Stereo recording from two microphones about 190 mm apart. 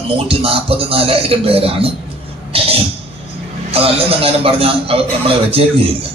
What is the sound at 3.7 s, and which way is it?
A man's voice, 30° right (ahead or behind).